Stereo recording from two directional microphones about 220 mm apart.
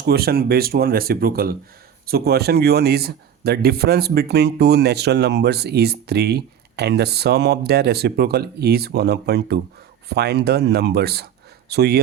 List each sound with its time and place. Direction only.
0.0 s speech: 45° right (ahead or behind)